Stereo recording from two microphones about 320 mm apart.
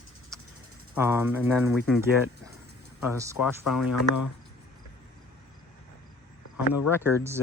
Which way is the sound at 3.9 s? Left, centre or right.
Left.